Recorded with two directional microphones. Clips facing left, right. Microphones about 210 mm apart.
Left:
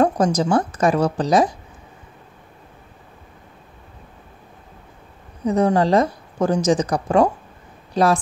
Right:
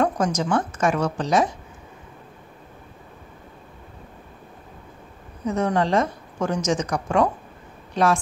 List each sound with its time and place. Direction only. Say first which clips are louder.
0.0 s a woman's voice: left 4 dB; 35° left (ahead or behind)
5.4 s a woman's voice: left 5 dB; 35° left (ahead or behind)